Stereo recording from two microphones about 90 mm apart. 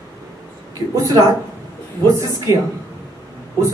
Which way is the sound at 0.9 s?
40° right (ahead or behind).